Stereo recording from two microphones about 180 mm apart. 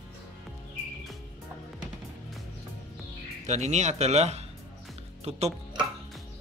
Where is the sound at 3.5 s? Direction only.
40° right (ahead or behind).